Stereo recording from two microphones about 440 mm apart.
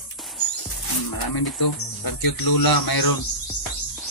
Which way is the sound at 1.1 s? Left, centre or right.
Left.